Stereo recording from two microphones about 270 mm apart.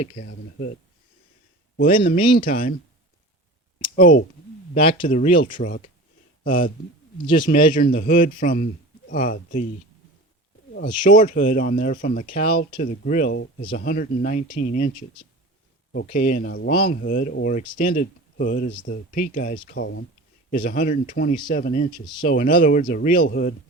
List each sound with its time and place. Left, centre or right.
1.7 s speech: left
3.9 s speech: left
7.3 s speech: centre
7.7 s speech: left
11.0 s speech: left
16.1 s speech: left
19.6 s speech: left
20.5 s speech: left
21.8 s speech: centre
22.3 s speech: left